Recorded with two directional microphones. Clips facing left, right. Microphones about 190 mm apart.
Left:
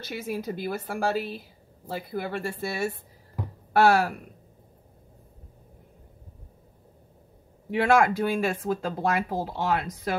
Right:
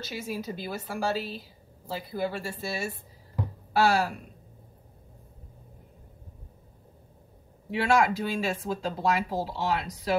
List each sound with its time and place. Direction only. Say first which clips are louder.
0.0 s speech: left 3 dB; 55° left (ahead or behind)
7.7 s speech: left 3 dB; 50° left (ahead or behind)